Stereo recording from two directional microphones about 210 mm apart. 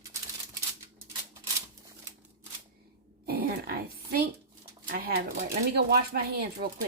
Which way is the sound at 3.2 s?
50° right (ahead or behind).